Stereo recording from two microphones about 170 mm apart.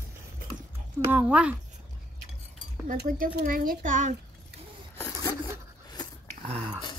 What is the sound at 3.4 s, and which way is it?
Speech, 55° right (ahead or behind).